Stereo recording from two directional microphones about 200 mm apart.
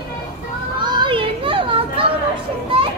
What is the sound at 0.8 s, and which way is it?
Children playing, 20° right (ahead or behind).